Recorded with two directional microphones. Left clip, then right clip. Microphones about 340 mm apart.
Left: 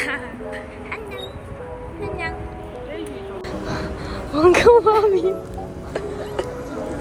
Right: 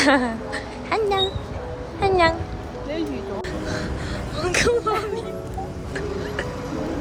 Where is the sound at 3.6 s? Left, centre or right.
Centre.